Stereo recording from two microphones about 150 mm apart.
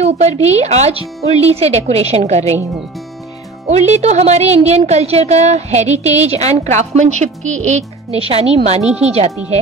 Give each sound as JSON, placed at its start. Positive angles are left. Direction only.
{"t": 0.0, "sound": "speech", "side_deg": -45}
{"t": 3.6, "sound": "speech", "side_deg": -45}
{"t": 8.8, "sound": "speech", "side_deg": -10}